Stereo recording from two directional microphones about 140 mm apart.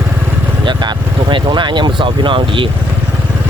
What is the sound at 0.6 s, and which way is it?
Speech, 30° right (ahead or behind).